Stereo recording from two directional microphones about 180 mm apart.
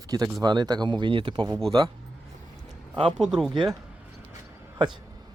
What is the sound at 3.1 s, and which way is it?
Speech, 5° right (ahead or behind).